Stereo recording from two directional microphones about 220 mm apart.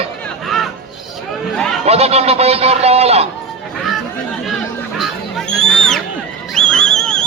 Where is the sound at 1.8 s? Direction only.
30° right (ahead or behind).